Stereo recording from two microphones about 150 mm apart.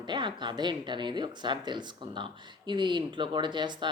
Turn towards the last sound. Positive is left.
turn(degrees=-30)  # may be behind; listen again after turning